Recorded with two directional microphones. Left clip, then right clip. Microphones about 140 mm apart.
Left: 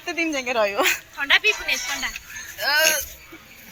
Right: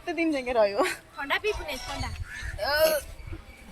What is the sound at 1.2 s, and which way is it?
Speech, 15° right (ahead or behind).